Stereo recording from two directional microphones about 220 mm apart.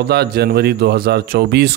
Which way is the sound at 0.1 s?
45° right (ahead or behind).